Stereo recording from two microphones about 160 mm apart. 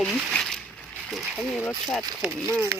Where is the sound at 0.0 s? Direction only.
Centre (ahead or behind).